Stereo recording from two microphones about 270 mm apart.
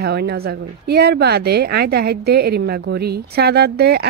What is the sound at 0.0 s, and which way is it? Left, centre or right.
A woman's voice, right.